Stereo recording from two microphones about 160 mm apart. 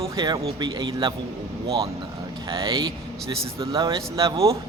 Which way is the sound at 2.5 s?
25° right (ahead or behind).